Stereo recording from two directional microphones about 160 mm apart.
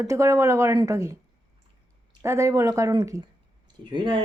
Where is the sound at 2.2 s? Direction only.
20° right (ahead or behind).